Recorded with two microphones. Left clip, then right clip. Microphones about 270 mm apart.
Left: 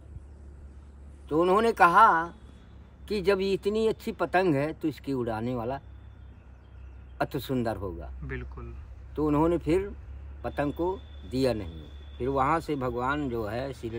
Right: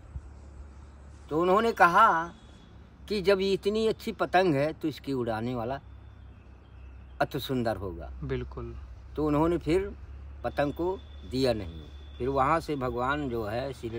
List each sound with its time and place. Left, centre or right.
1.3 s a man's voice: centre
7.2 s a man's voice: centre